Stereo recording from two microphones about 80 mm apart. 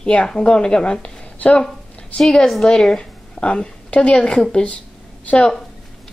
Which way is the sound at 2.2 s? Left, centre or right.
Centre.